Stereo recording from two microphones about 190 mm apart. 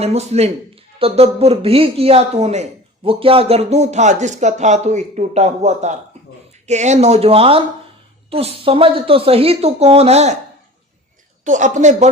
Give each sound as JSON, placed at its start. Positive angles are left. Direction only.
{"t": 0.0, "sound": "speech", "side_deg": -35}
{"t": 11.4, "sound": "speech", "side_deg": -40}